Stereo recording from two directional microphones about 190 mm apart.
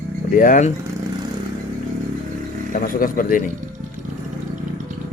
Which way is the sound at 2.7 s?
45° left (ahead or behind).